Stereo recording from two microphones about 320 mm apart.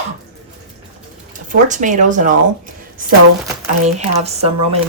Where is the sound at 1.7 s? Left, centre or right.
Right.